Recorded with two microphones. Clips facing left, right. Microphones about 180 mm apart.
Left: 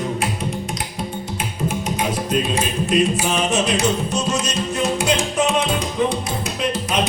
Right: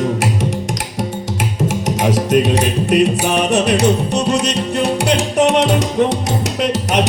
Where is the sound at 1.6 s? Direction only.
90° right.